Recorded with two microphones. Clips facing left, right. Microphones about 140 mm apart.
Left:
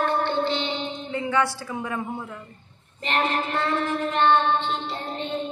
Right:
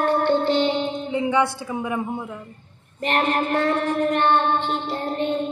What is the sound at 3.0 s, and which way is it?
Child singing, 50° right (ahead or behind).